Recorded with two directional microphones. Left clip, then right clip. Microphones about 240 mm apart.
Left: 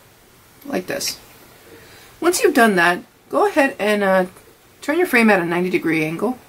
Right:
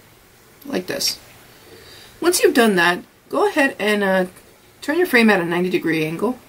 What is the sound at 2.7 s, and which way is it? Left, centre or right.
Speech, centre.